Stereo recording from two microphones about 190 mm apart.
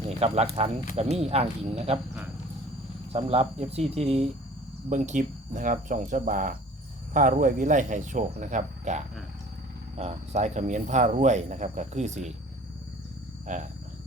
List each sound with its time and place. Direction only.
0.2 s speech: 30° right (ahead or behind)
3.1 s speech: 30° right (ahead or behind)
13.5 s speech: 40° right (ahead or behind)